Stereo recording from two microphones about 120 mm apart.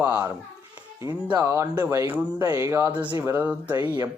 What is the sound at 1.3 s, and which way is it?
Speech, 20° right (ahead or behind).